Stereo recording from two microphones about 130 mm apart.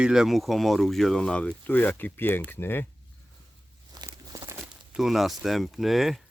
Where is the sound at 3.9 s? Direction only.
30° right (ahead or behind).